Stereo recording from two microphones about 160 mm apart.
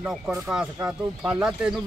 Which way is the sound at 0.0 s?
10° right (ahead or behind).